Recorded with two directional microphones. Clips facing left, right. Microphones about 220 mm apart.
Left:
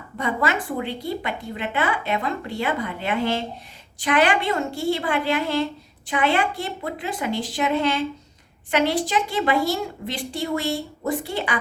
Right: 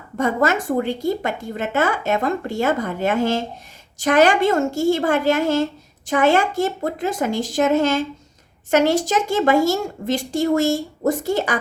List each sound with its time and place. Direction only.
0.2 s a woman's voice: 45° right (ahead or behind)